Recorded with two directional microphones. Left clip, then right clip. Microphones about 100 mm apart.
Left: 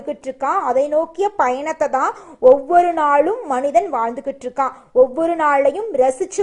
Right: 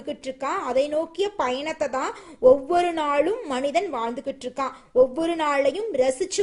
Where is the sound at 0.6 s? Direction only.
35° right (ahead or behind).